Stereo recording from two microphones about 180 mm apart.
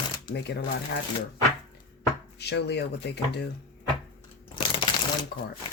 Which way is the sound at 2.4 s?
70° left (ahead or behind).